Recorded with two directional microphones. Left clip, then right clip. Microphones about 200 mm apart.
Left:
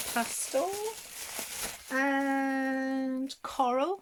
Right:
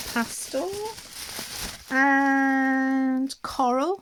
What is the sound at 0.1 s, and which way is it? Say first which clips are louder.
Speech: right 2 dB; 40° right (ahead or behind).